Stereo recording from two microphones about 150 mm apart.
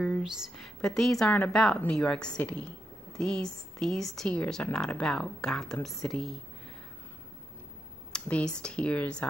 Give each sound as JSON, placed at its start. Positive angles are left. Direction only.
{"t": 0.0, "sound": "speech", "side_deg": 0}
{"t": 8.1, "sound": "computer keyboard", "side_deg": 5}
{"t": 8.6, "sound": "speech", "side_deg": 5}